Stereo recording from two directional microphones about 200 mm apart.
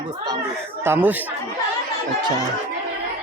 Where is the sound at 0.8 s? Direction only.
10° right (ahead or behind).